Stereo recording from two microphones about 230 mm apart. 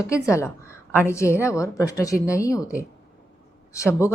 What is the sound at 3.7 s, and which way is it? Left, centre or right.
Speech, centre.